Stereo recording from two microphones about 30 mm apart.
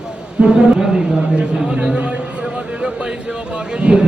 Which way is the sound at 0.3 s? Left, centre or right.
Right.